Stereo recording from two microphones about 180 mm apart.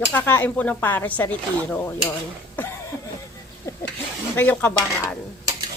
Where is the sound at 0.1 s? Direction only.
10° left (ahead or behind).